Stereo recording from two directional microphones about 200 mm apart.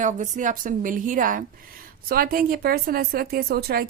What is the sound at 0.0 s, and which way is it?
A woman's voice, 40° right (ahead or behind).